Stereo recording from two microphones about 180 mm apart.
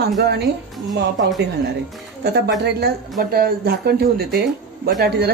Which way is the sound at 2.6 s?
65° right (ahead or behind).